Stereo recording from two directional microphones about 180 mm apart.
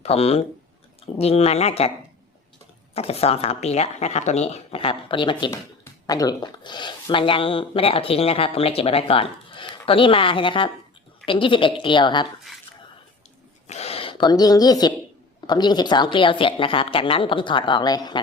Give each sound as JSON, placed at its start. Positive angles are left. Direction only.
{"t": 0.0, "sound": "speech", "side_deg": 35}
{"t": 2.9, "sound": "speech", "side_deg": 35}
{"t": 13.7, "sound": "a sound", "side_deg": 35}
{"t": 15.4, "sound": "speech", "side_deg": 25}